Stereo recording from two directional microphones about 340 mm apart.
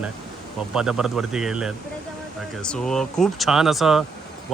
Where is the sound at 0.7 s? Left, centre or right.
Centre.